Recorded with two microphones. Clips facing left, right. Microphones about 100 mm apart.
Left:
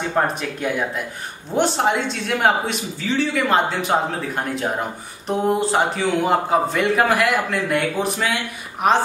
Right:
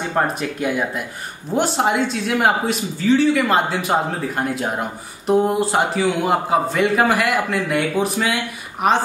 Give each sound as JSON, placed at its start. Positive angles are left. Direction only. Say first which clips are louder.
{"t": 0.1, "sound": "a man's voice", "louder": "right 2 dB", "side_deg": 0}